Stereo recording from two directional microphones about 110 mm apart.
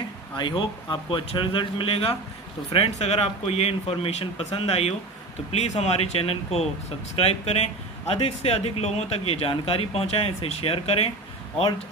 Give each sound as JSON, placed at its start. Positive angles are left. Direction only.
{"t": 0.4, "sound": "speech", "side_deg": 45}
{"t": 5.5, "sound": "speech", "side_deg": 85}